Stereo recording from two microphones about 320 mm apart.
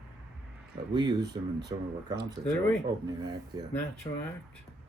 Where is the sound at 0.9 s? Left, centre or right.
Centre.